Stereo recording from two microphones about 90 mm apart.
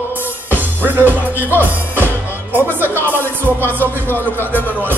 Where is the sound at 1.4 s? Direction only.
20° left (ahead or behind).